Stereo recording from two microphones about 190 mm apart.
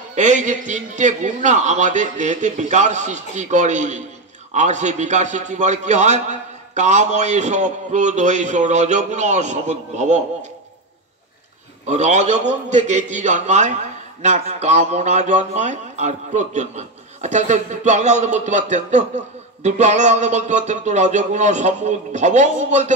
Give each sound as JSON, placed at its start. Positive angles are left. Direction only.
{"t": 0.1, "sound": "a man's voice", "side_deg": -40}
{"t": 11.8, "sound": "a man's voice", "side_deg": -40}